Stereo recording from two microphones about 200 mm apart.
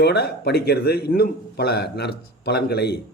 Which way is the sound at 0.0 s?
55° left (ahead or behind).